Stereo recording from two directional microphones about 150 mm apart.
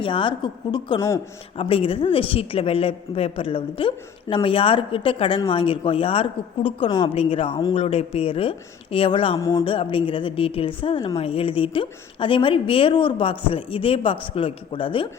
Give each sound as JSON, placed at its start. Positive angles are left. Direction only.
{"t": 0.0, "sound": "a woman's voice", "side_deg": 35}
{"t": 9.4, "sound": "speech", "side_deg": 25}
{"t": 9.6, "sound": "a woman's voice", "side_deg": 35}